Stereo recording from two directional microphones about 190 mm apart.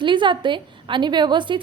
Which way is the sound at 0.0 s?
25° right (ahead or behind).